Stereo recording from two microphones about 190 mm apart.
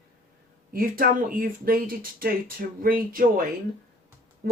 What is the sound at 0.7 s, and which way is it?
Speech, 50° right (ahead or behind).